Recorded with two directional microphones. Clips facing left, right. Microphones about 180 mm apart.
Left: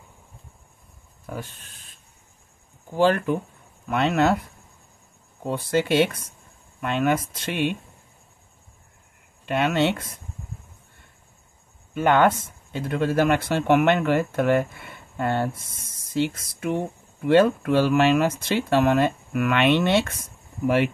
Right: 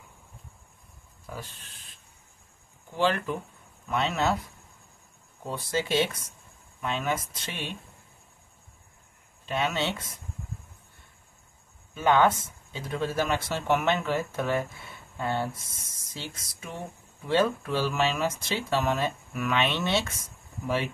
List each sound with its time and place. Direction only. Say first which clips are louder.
1.2 s speech: left 6 dB; 50° left (ahead or behind)
5.5 s speech: left 6 dB; 60° left (ahead or behind)
9.5 s speech: left 7 dB; 60° left (ahead or behind)
11.9 s speech: left 4 dB; 60° left (ahead or behind)